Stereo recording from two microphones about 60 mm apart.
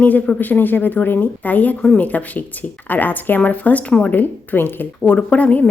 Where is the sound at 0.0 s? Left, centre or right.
Left.